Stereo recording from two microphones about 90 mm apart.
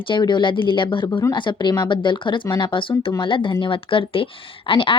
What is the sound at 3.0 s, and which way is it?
A woman's voice, 65° left (ahead or behind).